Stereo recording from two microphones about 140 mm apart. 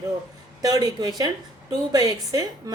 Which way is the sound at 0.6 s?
25° right (ahead or behind).